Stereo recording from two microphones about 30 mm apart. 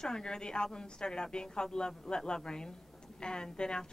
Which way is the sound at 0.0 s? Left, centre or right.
Left.